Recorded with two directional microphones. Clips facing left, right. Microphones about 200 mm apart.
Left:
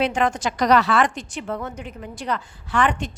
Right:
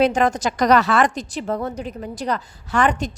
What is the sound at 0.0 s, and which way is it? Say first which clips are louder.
A woman's voice: right 4 dB; 40° right (ahead or behind).